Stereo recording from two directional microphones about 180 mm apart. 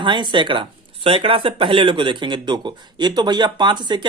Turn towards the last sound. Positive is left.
turn(degrees=-25)  # may be behind; listen again after turning